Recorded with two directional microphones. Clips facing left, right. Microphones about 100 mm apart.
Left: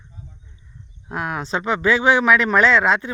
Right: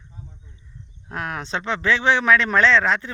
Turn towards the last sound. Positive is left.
turn(degrees=15)  # may be behind; listen again after turning